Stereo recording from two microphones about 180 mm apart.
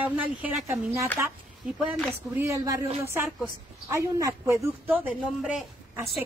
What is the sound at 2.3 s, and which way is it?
A woman's voice, 15° right (ahead or behind).